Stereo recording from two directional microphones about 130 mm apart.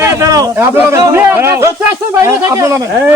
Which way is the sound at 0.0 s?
25° right (ahead or behind).